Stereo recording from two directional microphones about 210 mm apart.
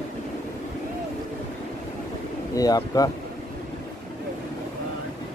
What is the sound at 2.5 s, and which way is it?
Speech, 15° left (ahead or behind).